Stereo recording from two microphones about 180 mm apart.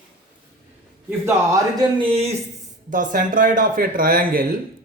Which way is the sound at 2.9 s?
45° right (ahead or behind).